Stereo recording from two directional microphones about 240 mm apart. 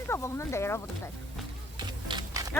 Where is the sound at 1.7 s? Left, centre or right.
Centre.